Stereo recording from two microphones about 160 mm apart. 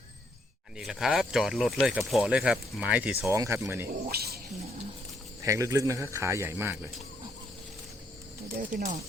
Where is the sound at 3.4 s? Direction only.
20° right (ahead or behind).